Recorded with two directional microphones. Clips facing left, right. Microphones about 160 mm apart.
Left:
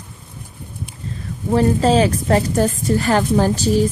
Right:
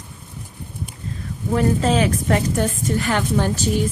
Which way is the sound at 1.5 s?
35° left (ahead or behind).